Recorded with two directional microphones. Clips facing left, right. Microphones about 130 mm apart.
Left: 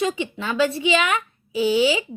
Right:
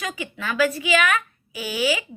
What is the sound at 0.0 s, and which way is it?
Speech, 30° left (ahead or behind).